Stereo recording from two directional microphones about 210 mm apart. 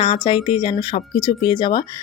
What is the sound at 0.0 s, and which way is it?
Speech, 25° left (ahead or behind).